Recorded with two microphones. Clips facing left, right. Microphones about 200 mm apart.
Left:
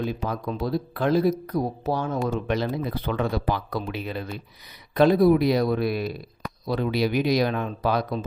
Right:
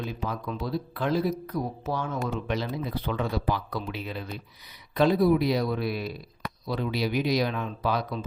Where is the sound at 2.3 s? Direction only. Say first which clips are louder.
Left 4 dB; 55° left (ahead or behind).